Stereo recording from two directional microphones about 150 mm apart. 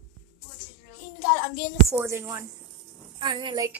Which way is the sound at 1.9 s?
15° right (ahead or behind).